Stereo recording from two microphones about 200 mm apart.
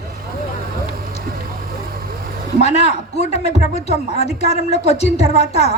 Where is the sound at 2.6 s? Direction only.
35° left (ahead or behind).